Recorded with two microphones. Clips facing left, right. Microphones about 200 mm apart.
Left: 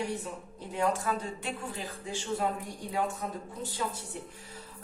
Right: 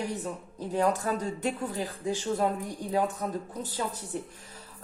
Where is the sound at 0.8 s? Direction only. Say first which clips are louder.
Right 3 dB; 40° right (ahead or behind).